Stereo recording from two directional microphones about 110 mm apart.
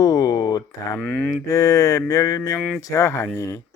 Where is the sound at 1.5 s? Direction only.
30° left (ahead or behind).